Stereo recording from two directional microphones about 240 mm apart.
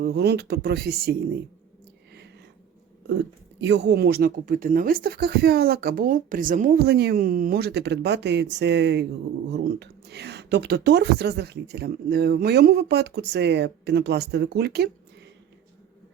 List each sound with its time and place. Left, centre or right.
0.0 s speech: right
3.1 s speech: right